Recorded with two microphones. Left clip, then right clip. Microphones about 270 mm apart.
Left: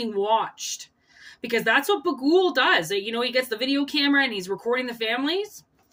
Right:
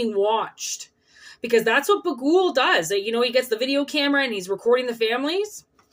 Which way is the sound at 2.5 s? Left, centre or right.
Left.